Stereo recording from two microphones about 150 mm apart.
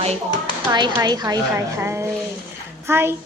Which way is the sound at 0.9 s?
25° right (ahead or behind).